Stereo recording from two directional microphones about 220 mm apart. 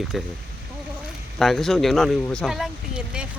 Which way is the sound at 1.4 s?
Centre (ahead or behind).